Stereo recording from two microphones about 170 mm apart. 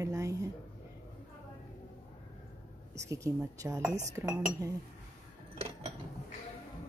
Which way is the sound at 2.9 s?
15° right (ahead or behind).